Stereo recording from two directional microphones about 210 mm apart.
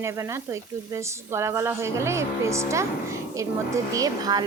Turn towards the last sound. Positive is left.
turn(degrees=-15)  # may be behind; listen again after turning